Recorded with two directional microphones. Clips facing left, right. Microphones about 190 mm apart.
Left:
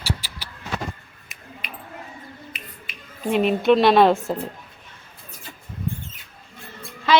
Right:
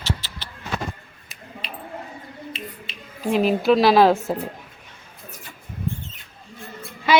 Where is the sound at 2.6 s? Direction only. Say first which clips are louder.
Right 8 dB; 30° right (ahead or behind).